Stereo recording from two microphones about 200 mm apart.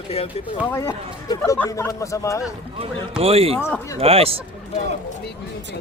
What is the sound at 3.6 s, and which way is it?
Speech, 15° left (ahead or behind).